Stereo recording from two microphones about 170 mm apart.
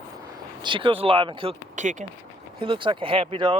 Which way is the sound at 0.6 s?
30° right (ahead or behind).